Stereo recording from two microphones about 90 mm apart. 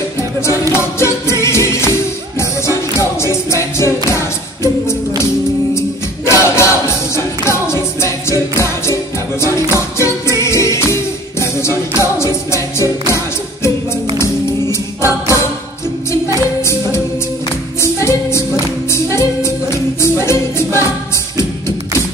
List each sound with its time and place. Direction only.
0.7 s music: 30° left (ahead or behind)
14.1 s music: 30° left (ahead or behind)
21.4 s beatboxing: 35° left (ahead or behind)